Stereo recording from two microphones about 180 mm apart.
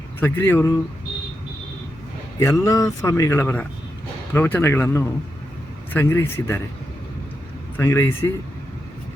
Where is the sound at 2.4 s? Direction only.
15° left (ahead or behind).